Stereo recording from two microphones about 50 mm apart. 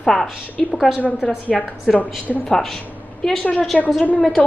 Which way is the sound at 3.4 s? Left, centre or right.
Left.